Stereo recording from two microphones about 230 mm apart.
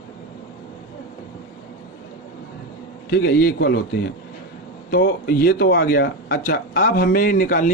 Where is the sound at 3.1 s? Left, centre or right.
Left.